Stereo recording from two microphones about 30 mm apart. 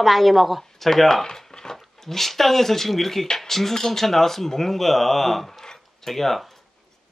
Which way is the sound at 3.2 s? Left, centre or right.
Left.